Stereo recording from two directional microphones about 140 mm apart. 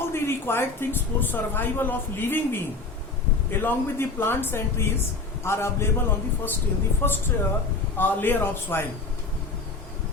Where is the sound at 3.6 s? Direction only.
15° left (ahead or behind).